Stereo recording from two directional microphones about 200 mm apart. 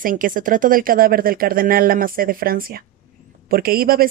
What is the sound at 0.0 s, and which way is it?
Speech, 45° right (ahead or behind).